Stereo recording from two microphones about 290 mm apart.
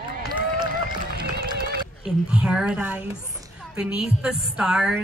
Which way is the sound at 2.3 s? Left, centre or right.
Centre.